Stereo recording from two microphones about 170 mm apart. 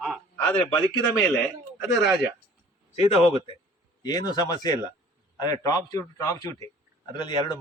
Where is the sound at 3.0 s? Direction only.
35° left (ahead or behind).